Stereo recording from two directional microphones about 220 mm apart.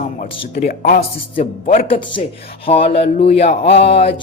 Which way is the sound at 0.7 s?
40° left (ahead or behind).